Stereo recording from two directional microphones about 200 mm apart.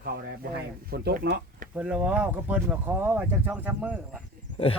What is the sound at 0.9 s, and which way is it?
Speech, 50° right (ahead or behind).